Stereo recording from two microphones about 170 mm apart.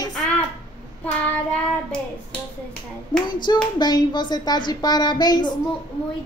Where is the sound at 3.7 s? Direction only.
25° left (ahead or behind).